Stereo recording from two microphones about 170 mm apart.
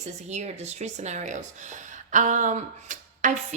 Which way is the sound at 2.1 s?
50° right (ahead or behind).